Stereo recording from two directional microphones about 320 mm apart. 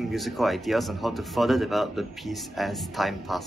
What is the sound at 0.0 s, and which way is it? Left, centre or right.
Speech, centre.